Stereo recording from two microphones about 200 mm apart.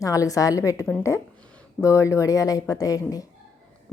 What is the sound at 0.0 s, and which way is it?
A woman's voice, 15° left (ahead or behind).